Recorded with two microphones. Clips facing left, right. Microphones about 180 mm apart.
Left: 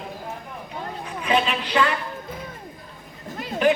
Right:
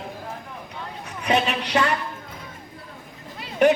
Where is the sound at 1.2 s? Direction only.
70° right (ahead or behind).